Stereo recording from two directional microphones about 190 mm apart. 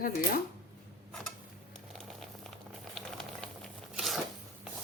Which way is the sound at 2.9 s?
Centre (ahead or behind).